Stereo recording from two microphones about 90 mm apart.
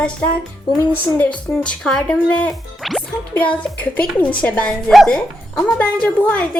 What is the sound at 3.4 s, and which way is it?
A woman's voice, 15° left (ahead or behind).